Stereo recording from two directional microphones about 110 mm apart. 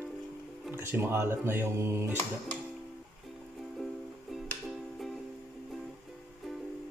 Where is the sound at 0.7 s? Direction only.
20° right (ahead or behind).